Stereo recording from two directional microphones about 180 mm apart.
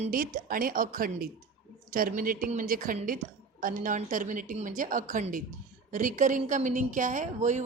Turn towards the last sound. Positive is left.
turn(degrees=-45)  # may be behind; listen again after turning